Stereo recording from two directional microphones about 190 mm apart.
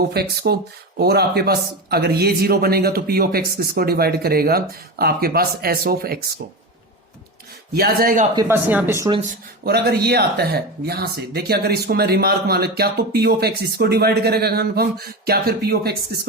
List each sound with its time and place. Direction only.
0.1 s a man's voice: 55° right (ahead or behind)
7.7 s a man's voice: 50° right (ahead or behind)
8.4 s speech: 10° right (ahead or behind)
9.3 s speech: 55° right (ahead or behind)